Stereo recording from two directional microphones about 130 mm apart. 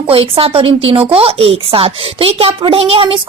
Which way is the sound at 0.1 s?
45° right (ahead or behind).